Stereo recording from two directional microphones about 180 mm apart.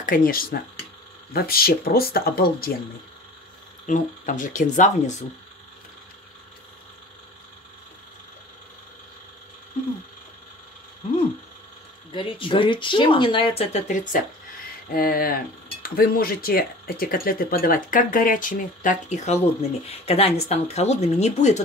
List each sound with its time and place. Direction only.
0.0 s speech: 50° left (ahead or behind)
3.8 s speech: 45° left (ahead or behind)
12.1 s speech: 30° left (ahead or behind)